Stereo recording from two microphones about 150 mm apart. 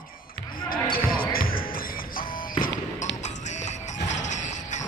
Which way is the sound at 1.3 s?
75° left (ahead or behind).